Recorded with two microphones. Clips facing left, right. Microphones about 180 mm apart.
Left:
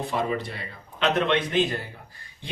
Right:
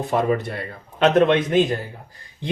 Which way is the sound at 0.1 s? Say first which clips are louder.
Right 10 dB; 50° right (ahead or behind).